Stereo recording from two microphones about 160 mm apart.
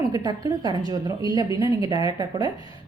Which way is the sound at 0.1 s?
25° right (ahead or behind).